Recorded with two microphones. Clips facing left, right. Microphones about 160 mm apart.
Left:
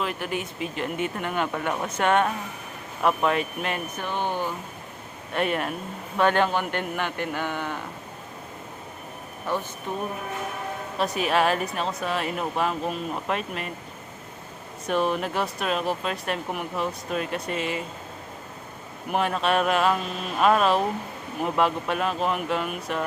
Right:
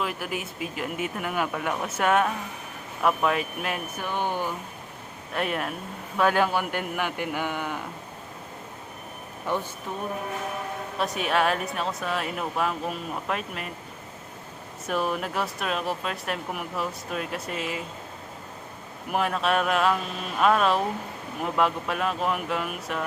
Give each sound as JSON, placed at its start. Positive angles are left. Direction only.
{"t": 0.0, "sound": "speech", "side_deg": -5}
{"t": 5.3, "sound": "a man's voice", "side_deg": 0}
{"t": 9.5, "sound": "a man's voice", "side_deg": -15}
{"t": 10.9, "sound": "speech", "side_deg": 0}
{"t": 14.8, "sound": "speech", "side_deg": -5}
{"t": 19.1, "sound": "speech", "side_deg": 0}